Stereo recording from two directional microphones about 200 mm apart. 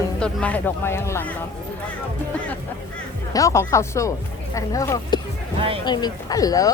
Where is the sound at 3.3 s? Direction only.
15° left (ahead or behind).